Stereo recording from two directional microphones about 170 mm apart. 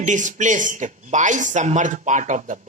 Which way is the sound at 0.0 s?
45° right (ahead or behind).